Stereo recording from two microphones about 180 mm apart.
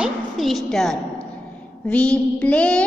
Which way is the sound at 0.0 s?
Centre (ahead or behind).